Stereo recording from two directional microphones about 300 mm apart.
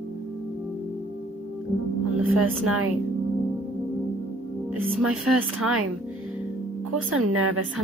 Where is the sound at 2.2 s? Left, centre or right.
Right.